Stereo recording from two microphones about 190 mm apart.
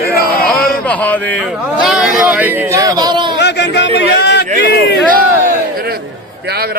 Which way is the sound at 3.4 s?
65° left (ahead or behind).